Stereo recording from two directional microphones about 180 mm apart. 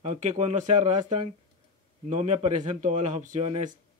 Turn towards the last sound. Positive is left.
turn(degrees=-40)  # may be behind; listen again after turning